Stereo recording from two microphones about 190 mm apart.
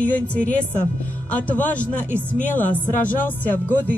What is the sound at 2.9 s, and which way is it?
Speech, 45° left (ahead or behind).